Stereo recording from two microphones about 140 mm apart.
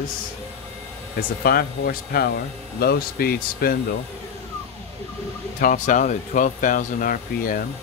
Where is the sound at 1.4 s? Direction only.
90° left.